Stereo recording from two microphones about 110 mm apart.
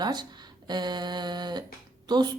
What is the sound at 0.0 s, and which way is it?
A woman's voice, 40° right (ahead or behind).